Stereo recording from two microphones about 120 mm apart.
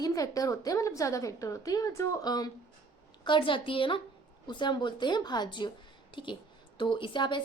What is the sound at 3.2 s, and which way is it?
A woman's voice, 45° left (ahead or behind).